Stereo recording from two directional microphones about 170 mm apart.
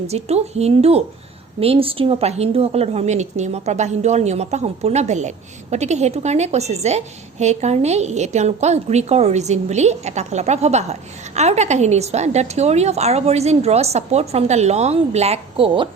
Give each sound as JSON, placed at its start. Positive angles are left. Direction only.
{"t": 0.1, "sound": "a woman's voice", "side_deg": -40}